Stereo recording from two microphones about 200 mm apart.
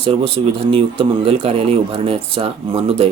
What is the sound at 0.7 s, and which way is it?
Speech, 25° right (ahead or behind).